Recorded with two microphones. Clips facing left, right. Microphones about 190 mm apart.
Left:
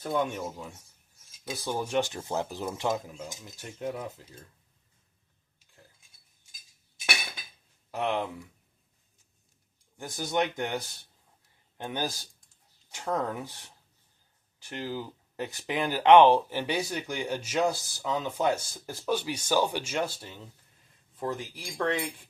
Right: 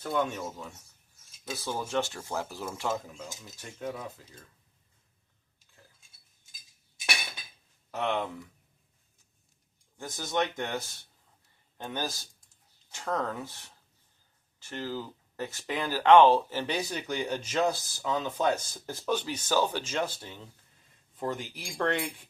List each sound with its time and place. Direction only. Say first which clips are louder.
0.1 s speech: left 1 dB; 15° left (ahead or behind)
7.9 s speech: left 1 dB; 10° left (ahead or behind)
10.3 s speech: left 1 dB; 10° left (ahead or behind)
21.2 s speech: even; centre (ahead or behind)